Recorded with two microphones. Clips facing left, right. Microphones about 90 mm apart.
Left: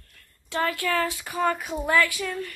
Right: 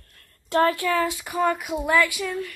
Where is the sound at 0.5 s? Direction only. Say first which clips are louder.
Right 7 dB; 40° right (ahead or behind).